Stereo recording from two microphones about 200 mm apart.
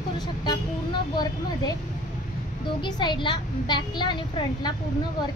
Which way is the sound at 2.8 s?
20° left (ahead or behind).